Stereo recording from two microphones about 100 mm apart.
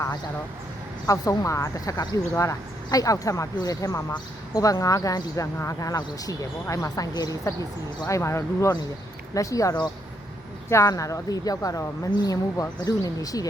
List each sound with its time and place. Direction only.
1.0 s speech: 35° left (ahead or behind)
8.0 s speech: 30° left (ahead or behind)